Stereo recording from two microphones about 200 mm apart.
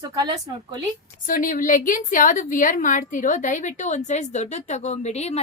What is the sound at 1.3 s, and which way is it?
A woman's voice, 40° left (ahead or behind).